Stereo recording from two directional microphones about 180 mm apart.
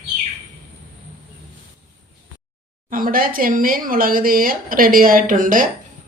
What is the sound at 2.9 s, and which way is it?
Speech, 50° right (ahead or behind).